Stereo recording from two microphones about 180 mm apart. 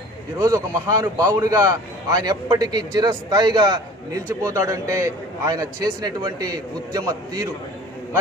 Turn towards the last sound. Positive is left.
turn(degrees=-20)  # may be behind; listen again after turning